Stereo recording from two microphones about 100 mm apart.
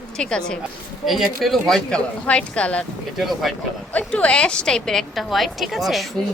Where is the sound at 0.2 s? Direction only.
10° left (ahead or behind).